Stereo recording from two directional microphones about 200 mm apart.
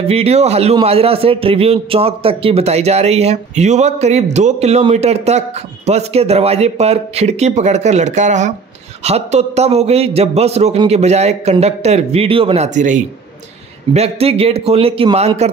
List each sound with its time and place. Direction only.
0.1 s a man's voice: 30° right (ahead or behind)